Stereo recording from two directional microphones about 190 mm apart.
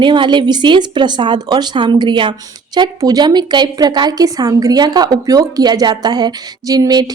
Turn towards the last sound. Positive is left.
turn(degrees=-20)  # may be behind; listen again after turning